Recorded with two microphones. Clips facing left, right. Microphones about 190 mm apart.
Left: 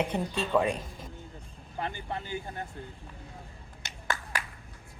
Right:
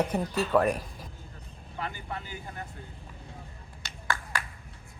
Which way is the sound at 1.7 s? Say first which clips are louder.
Left 2 dB; 25° left (ahead or behind).